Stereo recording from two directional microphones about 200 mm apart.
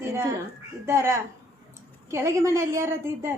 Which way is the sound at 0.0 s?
15° right (ahead or behind).